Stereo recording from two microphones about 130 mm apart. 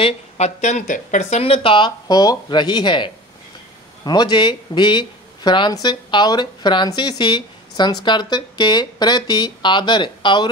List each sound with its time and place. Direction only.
0.0 s speech: 60° left (ahead or behind); by 1.4 s 75° left (ahead or behind)
1.4 s speech: 45° left (ahead or behind)